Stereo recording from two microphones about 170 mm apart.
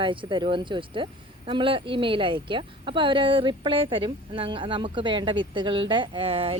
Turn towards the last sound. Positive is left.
turn(degrees=-35)  # may be behind; listen again after turning